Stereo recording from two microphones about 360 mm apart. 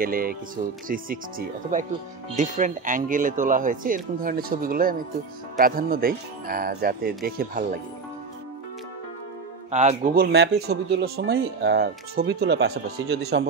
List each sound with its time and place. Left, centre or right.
0.0 s speech: right
2.3 s speech: right
9.7 s speech: centre